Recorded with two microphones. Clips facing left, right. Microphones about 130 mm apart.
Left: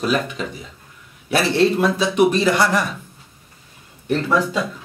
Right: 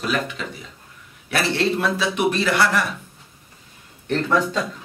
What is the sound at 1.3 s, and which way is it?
Speech, 15° left (ahead or behind).